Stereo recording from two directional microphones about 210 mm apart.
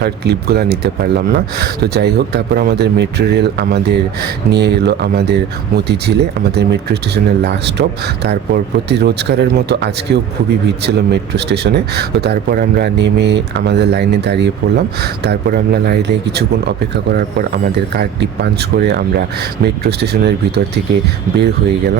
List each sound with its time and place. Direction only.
0.0 s speech: 50° right (ahead or behind)
21.3 s speech: 50° right (ahead or behind)